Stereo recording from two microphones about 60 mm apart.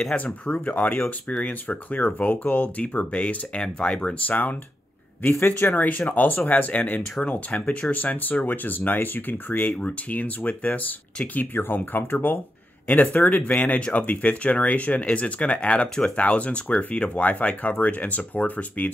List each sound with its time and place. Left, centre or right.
0.1 s speech: left
4.3 s speech: left
5.4 s speech: left
5.8 s speech: left